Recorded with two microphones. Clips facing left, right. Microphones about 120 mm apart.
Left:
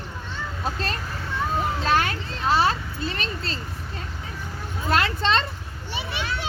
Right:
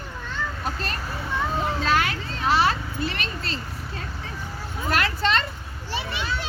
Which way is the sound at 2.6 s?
30° left (ahead or behind).